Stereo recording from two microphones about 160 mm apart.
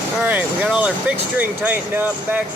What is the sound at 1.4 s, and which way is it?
Speech, 10° right (ahead or behind).